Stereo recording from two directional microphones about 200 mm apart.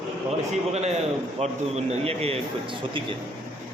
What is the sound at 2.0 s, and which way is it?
Speech, 30° right (ahead or behind).